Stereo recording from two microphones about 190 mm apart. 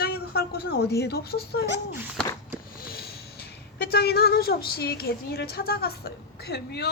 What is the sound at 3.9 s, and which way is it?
A woman's voice, 55° left (ahead or behind).